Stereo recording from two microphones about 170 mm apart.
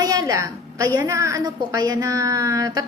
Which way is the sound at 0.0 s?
20° right (ahead or behind).